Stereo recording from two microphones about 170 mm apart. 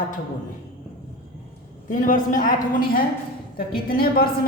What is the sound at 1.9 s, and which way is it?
A woman's voice, 50° left (ahead or behind).